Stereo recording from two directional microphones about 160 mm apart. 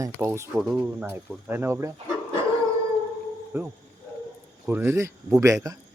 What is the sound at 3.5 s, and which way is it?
Speech, 15° right (ahead or behind).